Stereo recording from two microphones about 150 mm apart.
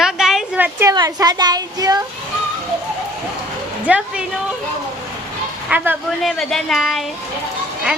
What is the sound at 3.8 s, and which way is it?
Speech, 10° right (ahead or behind).